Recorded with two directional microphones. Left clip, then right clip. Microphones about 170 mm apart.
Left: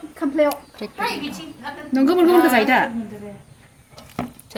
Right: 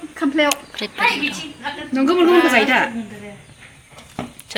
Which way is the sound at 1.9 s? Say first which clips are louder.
Right 1 dB; 35° left (ahead or behind).